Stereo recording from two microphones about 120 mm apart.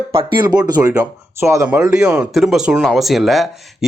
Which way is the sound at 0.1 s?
45° right (ahead or behind).